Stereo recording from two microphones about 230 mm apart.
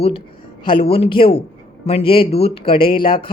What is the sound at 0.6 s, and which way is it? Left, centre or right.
Speech, left.